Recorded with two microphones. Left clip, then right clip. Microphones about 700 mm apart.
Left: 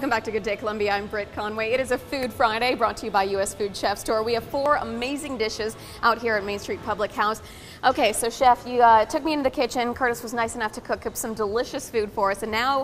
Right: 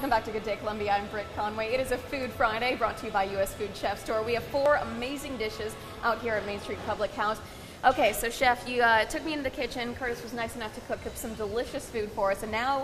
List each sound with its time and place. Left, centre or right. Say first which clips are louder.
0.0 s a woman's voice: left 3 dB; left